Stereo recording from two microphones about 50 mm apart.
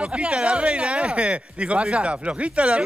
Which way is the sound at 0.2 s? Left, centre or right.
Right.